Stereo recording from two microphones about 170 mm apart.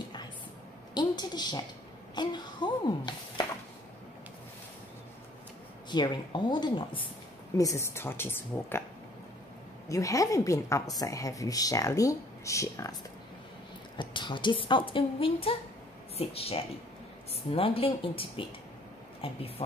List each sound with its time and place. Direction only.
0.9 s a woman's voice: 25° left (ahead or behind)
5.9 s a woman's voice: 25° left (ahead or behind)
7.5 s speech: 15° left (ahead or behind)
9.8 s a woman's voice: 20° left (ahead or behind)
13.9 s a woman's voice: 30° left (ahead or behind)